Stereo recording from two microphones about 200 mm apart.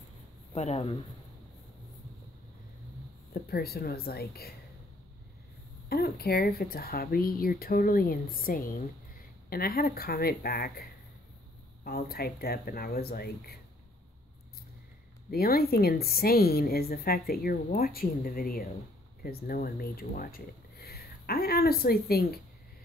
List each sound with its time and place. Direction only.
0.6 s speech: 35° left (ahead or behind)
3.3 s a woman's voice: 50° left (ahead or behind)
5.9 s a woman's voice: 50° left (ahead or behind)
15.3 s a woman's voice: 50° left (ahead or behind)